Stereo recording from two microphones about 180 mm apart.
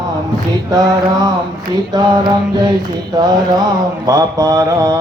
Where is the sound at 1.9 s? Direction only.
20° right (ahead or behind).